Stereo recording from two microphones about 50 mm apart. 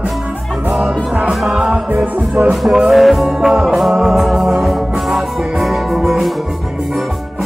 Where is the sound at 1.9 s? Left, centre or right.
Right.